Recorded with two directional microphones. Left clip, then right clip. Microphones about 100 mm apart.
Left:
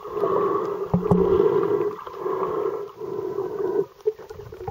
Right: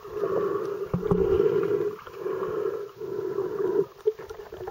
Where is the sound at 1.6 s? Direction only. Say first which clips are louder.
Left 3 dB; 20° right (ahead or behind).